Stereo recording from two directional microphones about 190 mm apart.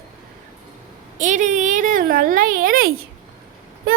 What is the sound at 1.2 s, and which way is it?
A woman's voice, 40° right (ahead or behind).